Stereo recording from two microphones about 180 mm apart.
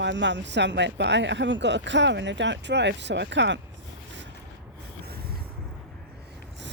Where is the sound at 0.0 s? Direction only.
80° right.